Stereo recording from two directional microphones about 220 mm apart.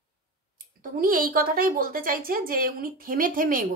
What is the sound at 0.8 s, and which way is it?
A woman's voice, 40° right (ahead or behind).